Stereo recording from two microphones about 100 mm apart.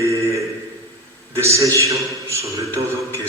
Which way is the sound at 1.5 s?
30° right (ahead or behind).